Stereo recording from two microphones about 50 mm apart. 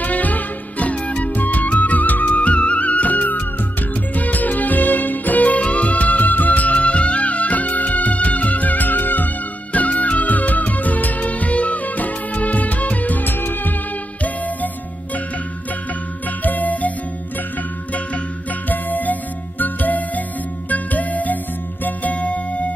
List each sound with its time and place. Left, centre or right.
0.0 s music: left
14.2 s music: left
16.3 s music: left
18.7 s music: left